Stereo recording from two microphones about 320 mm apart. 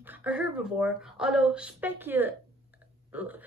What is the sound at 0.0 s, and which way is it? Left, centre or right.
A woman's voice, centre.